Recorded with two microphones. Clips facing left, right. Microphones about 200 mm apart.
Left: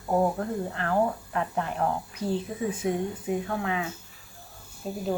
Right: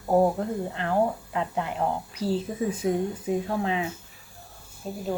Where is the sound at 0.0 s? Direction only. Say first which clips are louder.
Right 3 dB; 25° right (ahead or behind).